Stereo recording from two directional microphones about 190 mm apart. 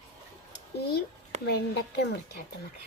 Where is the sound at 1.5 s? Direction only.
60° left (ahead or behind).